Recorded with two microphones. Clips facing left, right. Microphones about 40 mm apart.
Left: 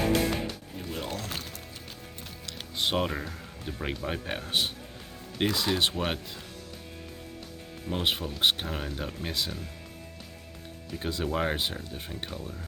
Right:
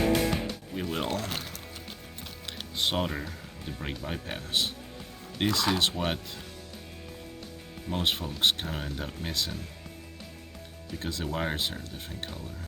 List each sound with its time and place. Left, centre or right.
0.0 s music: centre
0.9 s music: right
2.7 s speech: centre; by 4.7 s left
5.5 s speech: centre
7.9 s speech: centre
10.9 s speech: centre